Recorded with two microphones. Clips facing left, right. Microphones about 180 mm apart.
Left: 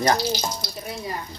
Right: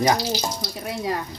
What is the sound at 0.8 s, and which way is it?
Speech, 90° right.